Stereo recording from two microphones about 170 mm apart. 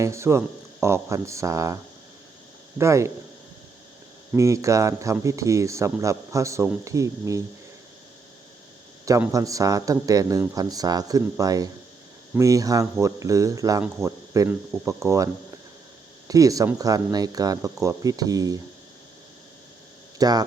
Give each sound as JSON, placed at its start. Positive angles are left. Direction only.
{"t": 0.0, "sound": "speech", "side_deg": -15}
{"t": 4.4, "sound": "speech", "side_deg": -20}
{"t": 9.3, "sound": "speech", "side_deg": -20}
{"t": 20.1, "sound": "speech", "side_deg": -20}